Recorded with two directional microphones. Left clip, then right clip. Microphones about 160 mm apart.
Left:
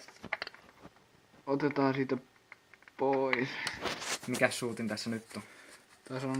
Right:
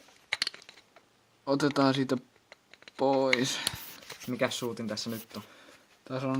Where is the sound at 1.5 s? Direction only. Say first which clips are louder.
Right 4 dB; 65° right (ahead or behind).